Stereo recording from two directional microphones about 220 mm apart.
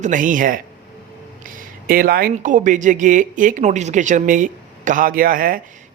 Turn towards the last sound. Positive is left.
turn(degrees=-40)  # may be behind; listen again after turning